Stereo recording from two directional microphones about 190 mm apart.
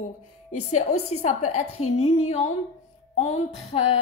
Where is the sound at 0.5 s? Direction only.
40° left (ahead or behind).